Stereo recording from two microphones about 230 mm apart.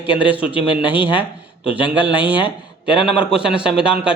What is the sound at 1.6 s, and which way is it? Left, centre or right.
Speech, left.